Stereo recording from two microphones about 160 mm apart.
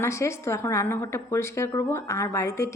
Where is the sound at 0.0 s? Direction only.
15° left (ahead or behind).